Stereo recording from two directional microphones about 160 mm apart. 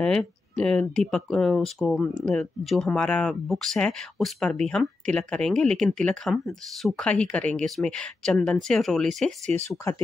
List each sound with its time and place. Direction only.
0.0 s speech: 5° left (ahead or behind)
9.7 s speech: 15° left (ahead or behind)